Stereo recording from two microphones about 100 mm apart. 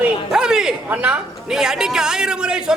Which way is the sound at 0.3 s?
5° right (ahead or behind).